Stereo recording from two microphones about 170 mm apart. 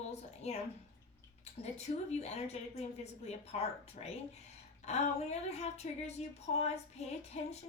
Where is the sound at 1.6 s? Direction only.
40° left (ahead or behind).